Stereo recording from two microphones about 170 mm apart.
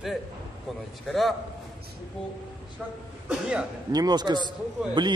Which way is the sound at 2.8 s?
Centre (ahead or behind).